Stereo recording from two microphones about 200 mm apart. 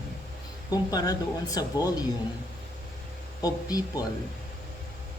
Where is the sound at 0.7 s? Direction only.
20° left (ahead or behind).